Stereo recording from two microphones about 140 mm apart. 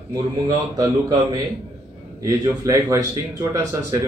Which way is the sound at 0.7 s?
25° right (ahead or behind).